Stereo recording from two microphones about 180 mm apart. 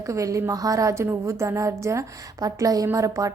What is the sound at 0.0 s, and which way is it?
Speech, 20° right (ahead or behind).